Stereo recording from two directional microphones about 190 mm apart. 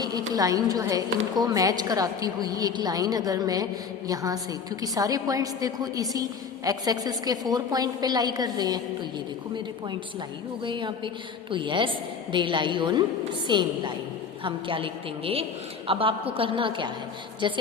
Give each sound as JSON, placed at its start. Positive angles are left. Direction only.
{"t": 0.0, "sound": "a woman's voice", "side_deg": -20}
{"t": 10.6, "sound": "a woman's voice", "side_deg": -25}